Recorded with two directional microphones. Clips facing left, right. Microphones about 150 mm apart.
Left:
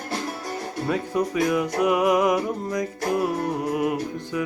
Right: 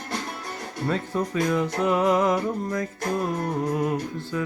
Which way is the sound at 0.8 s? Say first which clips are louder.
Left 1 dB; 10° left (ahead or behind).